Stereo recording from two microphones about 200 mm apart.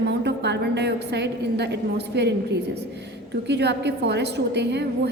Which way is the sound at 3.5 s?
55° right (ahead or behind).